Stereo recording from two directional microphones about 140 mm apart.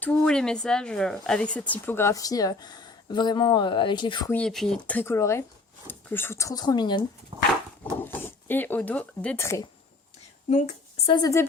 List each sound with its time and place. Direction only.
0.0 s speech: 5° left (ahead or behind); by 4.3 s 35° left (ahead or behind)
4.3 s speech: 5° left (ahead or behind); by 7.0 s 30° left (ahead or behind)
7.3 s dog: 40° right (ahead or behind)
8.0 s speech: 15° left (ahead or behind)
11.0 s speech: 35° left (ahead or behind)